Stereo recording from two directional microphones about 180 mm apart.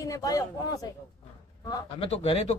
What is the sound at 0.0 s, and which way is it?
Speech, 20° left (ahead or behind).